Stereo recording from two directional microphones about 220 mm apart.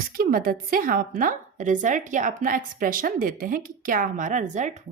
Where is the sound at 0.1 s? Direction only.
40° right (ahead or behind).